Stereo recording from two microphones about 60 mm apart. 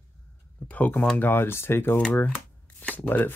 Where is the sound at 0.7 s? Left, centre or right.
Left.